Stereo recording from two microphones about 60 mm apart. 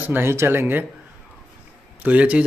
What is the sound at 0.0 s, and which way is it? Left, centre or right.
Speech, right.